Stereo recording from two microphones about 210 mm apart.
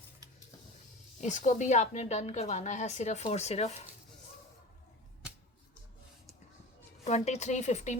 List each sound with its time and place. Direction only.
1.2 s a woman's voice: 35° left (ahead or behind)
7.0 s a woman's voice: 35° left (ahead or behind)